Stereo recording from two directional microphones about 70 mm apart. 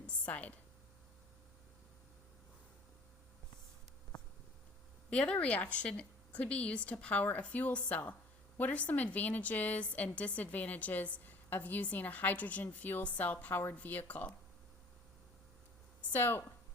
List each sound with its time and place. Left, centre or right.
0.0 s a sound: centre
5.1 s a woman's voice: centre
16.0 s speech: left